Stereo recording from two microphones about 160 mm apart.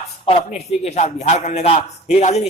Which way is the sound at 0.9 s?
40° left (ahead or behind).